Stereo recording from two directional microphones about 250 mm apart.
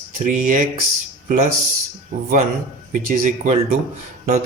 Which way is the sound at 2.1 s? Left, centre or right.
Right.